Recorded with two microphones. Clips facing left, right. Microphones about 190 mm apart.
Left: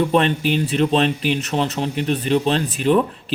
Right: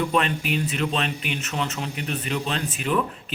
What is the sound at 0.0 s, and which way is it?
A man's voice, 30° left (ahead or behind).